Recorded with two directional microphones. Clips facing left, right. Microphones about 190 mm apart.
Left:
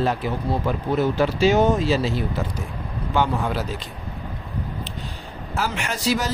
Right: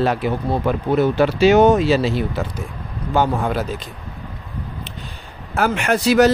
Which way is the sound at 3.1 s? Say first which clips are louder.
Right 4 dB; 45° right (ahead or behind).